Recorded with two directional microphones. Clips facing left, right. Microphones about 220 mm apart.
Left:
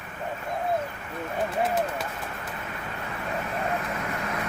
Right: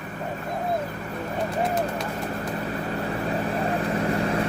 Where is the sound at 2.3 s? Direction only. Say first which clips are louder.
Right 8 dB; 35° right (ahead or behind).